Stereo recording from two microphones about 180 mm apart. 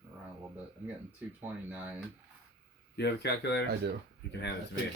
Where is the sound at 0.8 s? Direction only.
10° right (ahead or behind).